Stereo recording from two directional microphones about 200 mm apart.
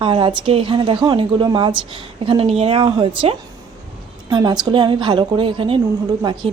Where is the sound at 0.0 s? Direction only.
25° right (ahead or behind).